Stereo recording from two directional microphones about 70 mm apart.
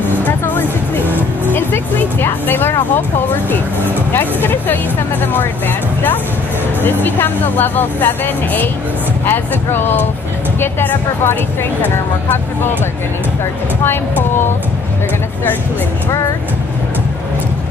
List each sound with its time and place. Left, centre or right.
1.5 s speech: left
4.1 s speech: left
6.8 s speech: left
9.2 s speech: left